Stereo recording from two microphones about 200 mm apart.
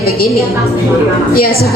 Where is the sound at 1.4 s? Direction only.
50° left (ahead or behind).